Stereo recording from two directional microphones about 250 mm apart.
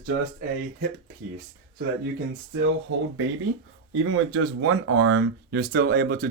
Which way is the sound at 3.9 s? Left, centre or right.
Right.